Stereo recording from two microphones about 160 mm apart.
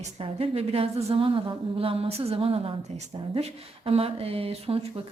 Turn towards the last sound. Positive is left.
turn(degrees=-35)  # may be behind; listen again after turning